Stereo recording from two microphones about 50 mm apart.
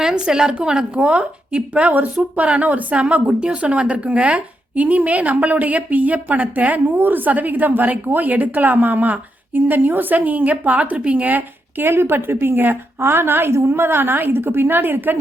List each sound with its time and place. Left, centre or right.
0.0 s a woman's voice: centre; by 11.9 s right
11.9 s a woman's voice: right